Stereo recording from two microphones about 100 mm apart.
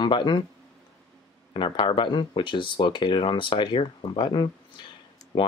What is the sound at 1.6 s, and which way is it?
Speech, 60° left (ahead or behind).